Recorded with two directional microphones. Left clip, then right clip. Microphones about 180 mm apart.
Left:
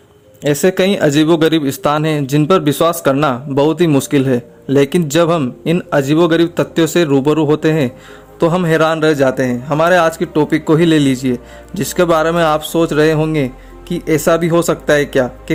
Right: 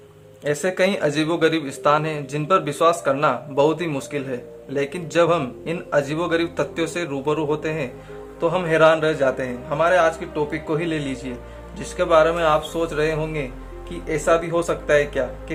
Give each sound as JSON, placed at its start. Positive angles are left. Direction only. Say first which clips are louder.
{"t": 0.4, "sound": "a man's voice", "louder": "left 7 dB", "side_deg": 40}